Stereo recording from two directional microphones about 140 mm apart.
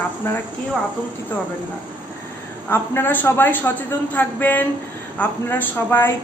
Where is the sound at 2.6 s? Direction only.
15° left (ahead or behind).